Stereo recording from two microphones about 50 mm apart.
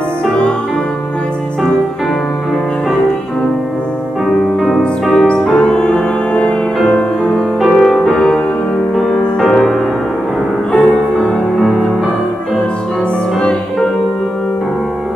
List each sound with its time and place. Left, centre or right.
4.6 s music: centre
5.5 s music: centre
7.6 s music: centre
8.9 s music: centre
10.7 s music: centre